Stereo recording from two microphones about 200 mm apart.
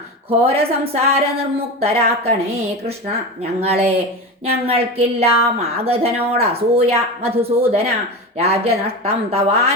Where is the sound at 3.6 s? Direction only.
30° right (ahead or behind).